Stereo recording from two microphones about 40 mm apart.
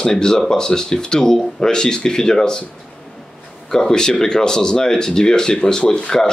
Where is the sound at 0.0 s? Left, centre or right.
Centre.